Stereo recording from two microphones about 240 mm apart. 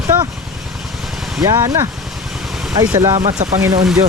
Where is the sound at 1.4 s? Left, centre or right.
Centre.